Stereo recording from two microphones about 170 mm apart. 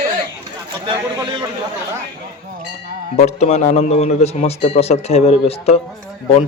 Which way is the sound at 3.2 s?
40° left (ahead or behind).